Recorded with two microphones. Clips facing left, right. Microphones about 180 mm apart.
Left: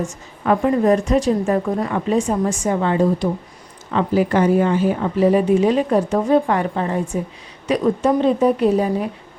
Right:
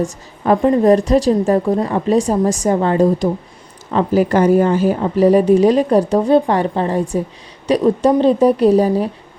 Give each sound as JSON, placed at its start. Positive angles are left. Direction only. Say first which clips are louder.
{"t": 0.0, "sound": "a woman's voice", "louder": "right 4 dB", "side_deg": -35}